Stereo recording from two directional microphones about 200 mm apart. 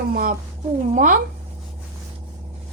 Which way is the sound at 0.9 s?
40° right (ahead or behind).